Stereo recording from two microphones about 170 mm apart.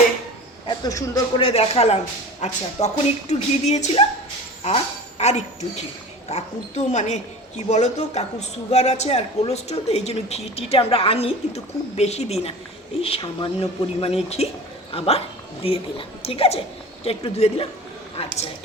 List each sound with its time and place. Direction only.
0.7 s speech: 20° left (ahead or behind)
1.4 s speech: 35° left (ahead or behind)